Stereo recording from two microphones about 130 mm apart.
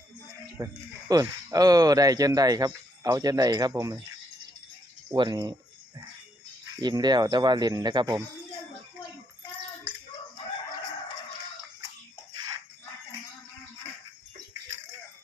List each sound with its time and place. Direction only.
0.6 s speech: 30° right (ahead or behind)
5.1 s speech: 35° right (ahead or behind)
6.8 s speech: 30° right (ahead or behind)